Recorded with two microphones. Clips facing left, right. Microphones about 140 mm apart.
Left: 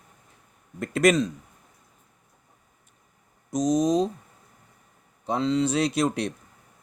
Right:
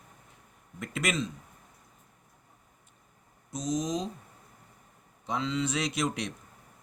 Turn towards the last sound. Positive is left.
turn(degrees=35)  # may be behind; listen again after turning